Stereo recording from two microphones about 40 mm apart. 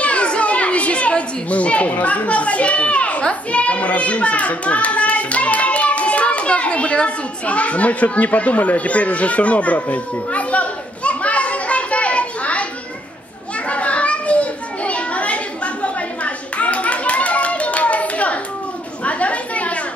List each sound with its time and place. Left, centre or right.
0.0 s children playing: left
3.3 s a child's voice: left
13.7 s children playing: left
19.0 s chatter: left